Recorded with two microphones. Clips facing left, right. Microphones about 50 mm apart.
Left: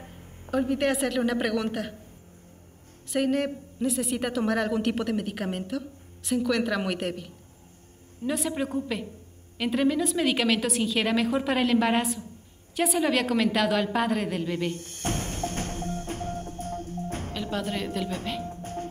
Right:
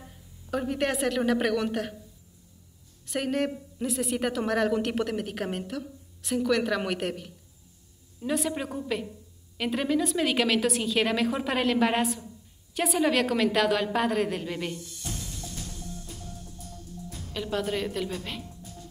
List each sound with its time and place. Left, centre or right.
0.0 s a sound: left
0.5 s a woman's voice: centre
3.1 s a woman's voice: centre
14.7 s music: left
17.3 s music: centre
18.4 s music: left